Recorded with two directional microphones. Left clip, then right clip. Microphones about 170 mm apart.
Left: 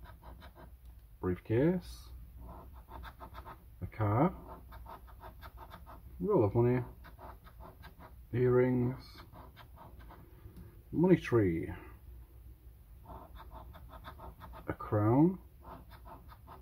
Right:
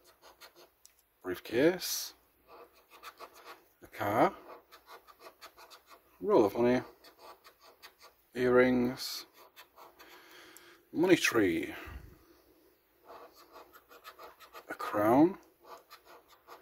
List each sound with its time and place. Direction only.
1.3 s speech: 50° right (ahead or behind)
4.0 s speech: 60° right (ahead or behind)
6.2 s speech: 55° right (ahead or behind)
8.4 s speech: 60° right (ahead or behind)
11.0 s speech: 50° right (ahead or behind)
14.8 s speech: 55° right (ahead or behind)